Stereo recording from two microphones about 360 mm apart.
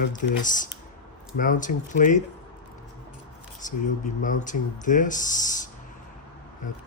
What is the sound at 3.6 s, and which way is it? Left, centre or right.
Speech, left.